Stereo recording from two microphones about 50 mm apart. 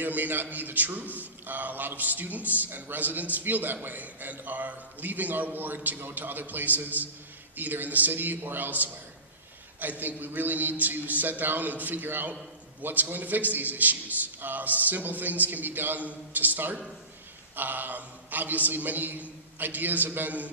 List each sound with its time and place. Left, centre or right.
0.0 s a man's voice: right